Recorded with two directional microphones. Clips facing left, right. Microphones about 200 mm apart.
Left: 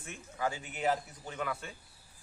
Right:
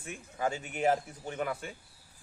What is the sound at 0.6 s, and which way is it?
Speech, 45° right (ahead or behind).